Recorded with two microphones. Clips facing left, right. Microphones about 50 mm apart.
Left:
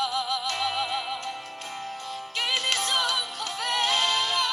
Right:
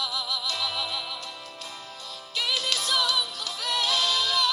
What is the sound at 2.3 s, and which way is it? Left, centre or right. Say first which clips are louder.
Music: left 1 dB; left.